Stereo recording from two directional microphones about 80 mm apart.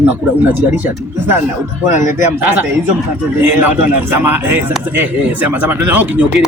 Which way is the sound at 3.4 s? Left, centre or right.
Right.